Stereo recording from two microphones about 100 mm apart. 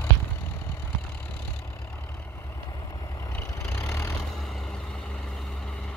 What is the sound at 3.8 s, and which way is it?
Vehicle, 35° left (ahead or behind).